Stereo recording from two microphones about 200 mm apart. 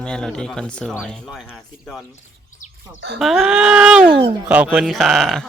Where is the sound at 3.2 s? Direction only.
Centre (ahead or behind).